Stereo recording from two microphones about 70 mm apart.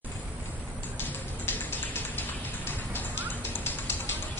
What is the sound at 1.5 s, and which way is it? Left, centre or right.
Music, left.